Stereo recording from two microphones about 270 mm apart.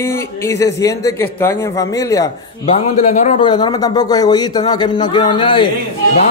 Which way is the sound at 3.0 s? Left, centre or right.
Left.